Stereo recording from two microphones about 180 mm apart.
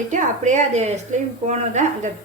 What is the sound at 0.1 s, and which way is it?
A woman's voice, 45° right (ahead or behind).